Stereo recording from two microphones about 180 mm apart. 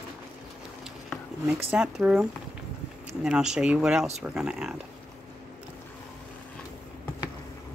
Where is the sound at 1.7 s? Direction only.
5° right (ahead or behind).